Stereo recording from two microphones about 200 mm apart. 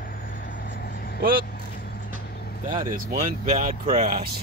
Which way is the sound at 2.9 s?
45° right (ahead or behind).